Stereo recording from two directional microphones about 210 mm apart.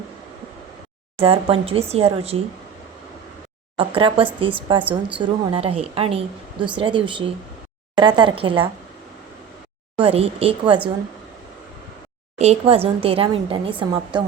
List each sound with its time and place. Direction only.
1.2 s a woman's voice: 25° right (ahead or behind)
3.8 s a woman's voice: 25° right (ahead or behind)
4.8 s a woman's voice: 5° right (ahead or behind)
5.2 s a woman's voice: 25° right (ahead or behind)
10.0 s a woman's voice: 25° right (ahead or behind)
12.4 s a woman's voice: 30° right (ahead or behind)